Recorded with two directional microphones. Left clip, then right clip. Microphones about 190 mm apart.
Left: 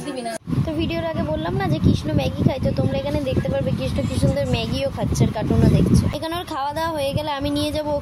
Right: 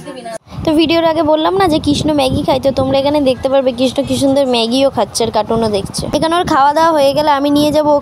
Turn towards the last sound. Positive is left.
turn(degrees=-40)  # may be behind; listen again after turning